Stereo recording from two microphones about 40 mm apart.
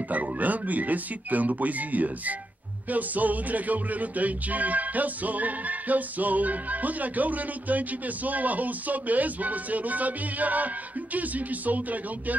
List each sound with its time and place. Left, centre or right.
0.1 s music: right